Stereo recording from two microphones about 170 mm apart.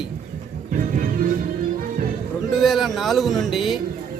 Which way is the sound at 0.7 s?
50° right (ahead or behind).